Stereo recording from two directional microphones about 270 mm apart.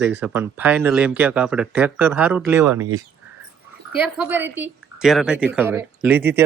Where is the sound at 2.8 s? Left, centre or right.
Right.